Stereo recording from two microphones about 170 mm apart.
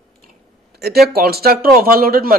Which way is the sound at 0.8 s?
70° right (ahead or behind).